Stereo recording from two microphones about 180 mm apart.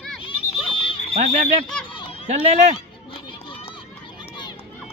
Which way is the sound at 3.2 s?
30° left (ahead or behind).